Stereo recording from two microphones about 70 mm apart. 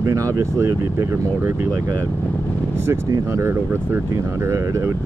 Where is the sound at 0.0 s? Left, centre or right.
Right.